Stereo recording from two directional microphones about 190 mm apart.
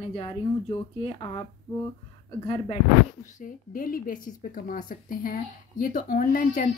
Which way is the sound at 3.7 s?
50° left (ahead or behind).